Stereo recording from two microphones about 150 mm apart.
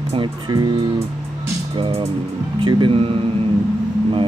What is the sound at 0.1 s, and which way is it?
Speech, 30° right (ahead or behind).